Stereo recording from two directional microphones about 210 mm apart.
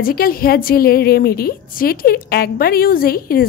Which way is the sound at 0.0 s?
45° left (ahead or behind).